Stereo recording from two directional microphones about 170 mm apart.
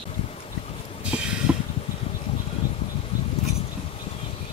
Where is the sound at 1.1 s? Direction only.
5° right (ahead or behind).